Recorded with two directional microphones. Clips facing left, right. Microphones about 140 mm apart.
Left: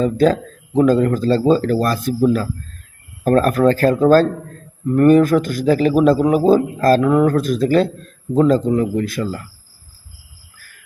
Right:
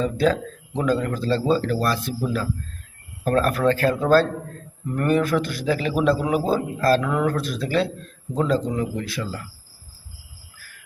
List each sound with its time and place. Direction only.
0.0 s a man's voice: 40° left (ahead or behind)